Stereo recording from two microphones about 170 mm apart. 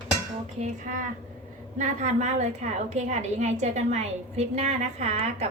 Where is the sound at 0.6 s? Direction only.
50° right (ahead or behind).